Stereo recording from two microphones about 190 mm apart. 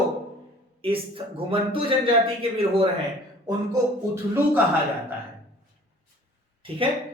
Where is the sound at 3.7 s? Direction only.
15° right (ahead or behind).